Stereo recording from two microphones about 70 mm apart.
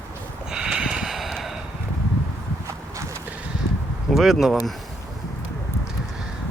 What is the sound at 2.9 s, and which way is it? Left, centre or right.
Clip-clop, right.